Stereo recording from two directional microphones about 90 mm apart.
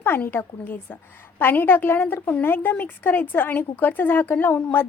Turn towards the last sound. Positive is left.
turn(degrees=20)  # may be behind; listen again after turning